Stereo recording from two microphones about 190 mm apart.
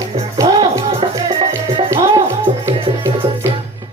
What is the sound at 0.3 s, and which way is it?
Music, 25° right (ahead or behind).